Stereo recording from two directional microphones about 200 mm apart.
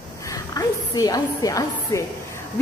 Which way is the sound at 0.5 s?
20° left (ahead or behind).